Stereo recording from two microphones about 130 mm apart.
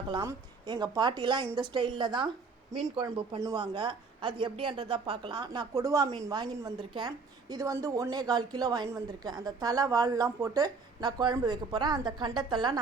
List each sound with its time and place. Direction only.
0.7 s a woman's voice: 35° right (ahead or behind)